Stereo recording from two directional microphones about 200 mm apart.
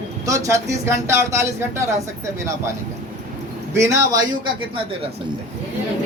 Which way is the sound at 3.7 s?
15° right (ahead or behind).